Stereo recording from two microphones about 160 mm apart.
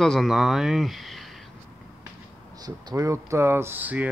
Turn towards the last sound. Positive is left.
turn(degrees=-10)  # may be behind; listen again after turning